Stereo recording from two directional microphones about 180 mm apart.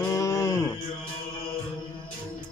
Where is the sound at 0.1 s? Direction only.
15° left (ahead or behind).